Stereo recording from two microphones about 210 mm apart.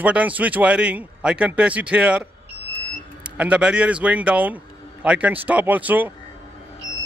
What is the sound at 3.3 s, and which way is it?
Speech, 5° right (ahead or behind).